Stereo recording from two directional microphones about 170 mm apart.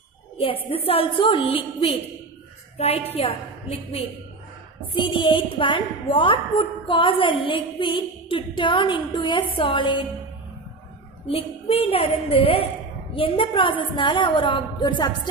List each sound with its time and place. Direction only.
0.4 s a woman's voice: 35° left (ahead or behind)
11.2 s a woman's voice: 35° left (ahead or behind)